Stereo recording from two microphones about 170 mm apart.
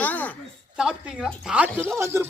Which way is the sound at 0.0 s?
10° left (ahead or behind).